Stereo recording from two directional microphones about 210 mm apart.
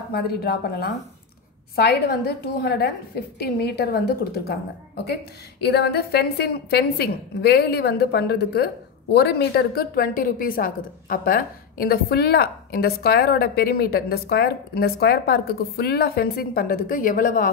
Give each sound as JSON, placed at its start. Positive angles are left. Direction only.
{"t": 0.1, "sound": "a woman's voice", "side_deg": 50}